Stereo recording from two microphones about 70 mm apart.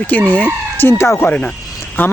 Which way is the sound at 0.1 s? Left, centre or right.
Left.